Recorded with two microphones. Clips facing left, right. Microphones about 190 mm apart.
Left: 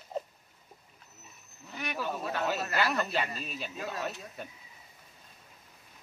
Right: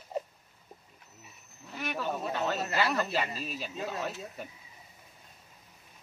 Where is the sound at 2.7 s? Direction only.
5° right (ahead or behind).